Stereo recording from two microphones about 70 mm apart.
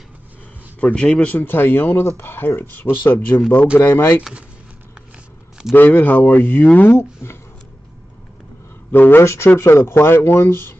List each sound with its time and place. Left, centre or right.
0.7 s a man's voice: centre
1.4 s speech: left
4.2 s speech: centre
5.7 s speech: left
6.9 s speech: left
8.9 s speech: left